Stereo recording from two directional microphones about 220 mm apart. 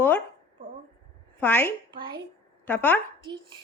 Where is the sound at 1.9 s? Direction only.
20° right (ahead or behind).